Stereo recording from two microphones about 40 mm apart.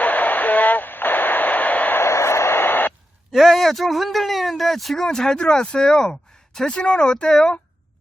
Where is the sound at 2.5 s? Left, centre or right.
Left.